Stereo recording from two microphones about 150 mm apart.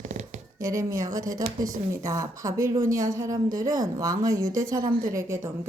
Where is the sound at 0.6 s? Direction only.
20° right (ahead or behind).